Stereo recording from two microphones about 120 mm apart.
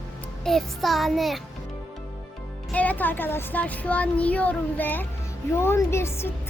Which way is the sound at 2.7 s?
15° left (ahead or behind).